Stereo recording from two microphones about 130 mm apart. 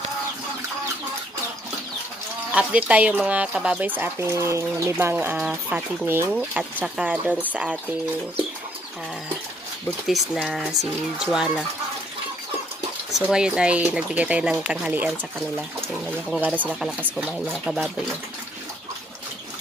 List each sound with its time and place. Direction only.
2.5 s speech: 10° right (ahead or behind)
10.0 s speech: centre (ahead or behind)
13.1 s speech: 5° right (ahead or behind)
16.3 s speech: 10° right (ahead or behind)